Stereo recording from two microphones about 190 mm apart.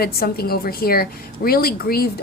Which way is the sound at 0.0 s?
55° left (ahead or behind).